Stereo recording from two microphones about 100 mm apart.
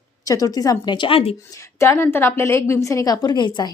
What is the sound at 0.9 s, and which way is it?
Speech, 60° left (ahead or behind).